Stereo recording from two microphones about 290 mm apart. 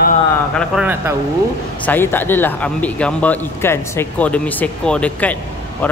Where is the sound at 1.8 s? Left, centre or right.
Centre.